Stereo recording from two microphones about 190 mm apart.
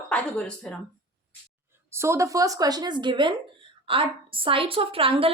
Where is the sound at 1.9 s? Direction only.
15° right (ahead or behind).